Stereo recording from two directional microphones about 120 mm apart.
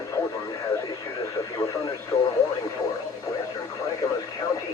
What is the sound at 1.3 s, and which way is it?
Speech, 25° left (ahead or behind).